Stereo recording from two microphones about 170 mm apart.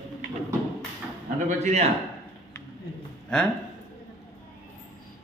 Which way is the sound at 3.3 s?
5° left (ahead or behind).